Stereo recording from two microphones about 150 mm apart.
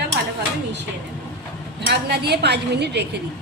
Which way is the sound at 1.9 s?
90° right.